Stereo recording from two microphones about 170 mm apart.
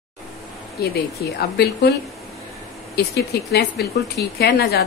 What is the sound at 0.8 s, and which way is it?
A woman's voice, 65° left (ahead or behind).